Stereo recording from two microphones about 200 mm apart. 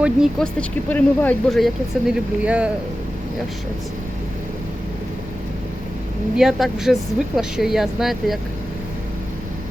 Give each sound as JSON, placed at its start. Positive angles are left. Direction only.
{"t": 0.0, "sound": "speech", "side_deg": 0}
{"t": 6.3, "sound": "speech", "side_deg": 0}